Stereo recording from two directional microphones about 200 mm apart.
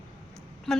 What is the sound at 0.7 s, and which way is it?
Speech, centre (ahead or behind).